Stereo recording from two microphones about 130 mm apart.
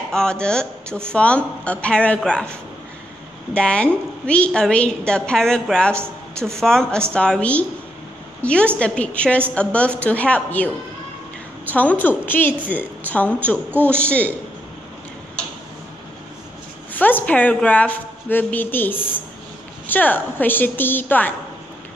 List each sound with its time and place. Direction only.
0.1 s a woman's voice: 5° left (ahead or behind)
3.5 s a woman's voice: 10° left (ahead or behind)
11.7 s a woman's voice: 10° left (ahead or behind)
13.7 s a man's voice: 15° right (ahead or behind)
13.9 s a woman's voice: 10° left (ahead or behind)
16.9 s a woman's voice: 15° left (ahead or behind)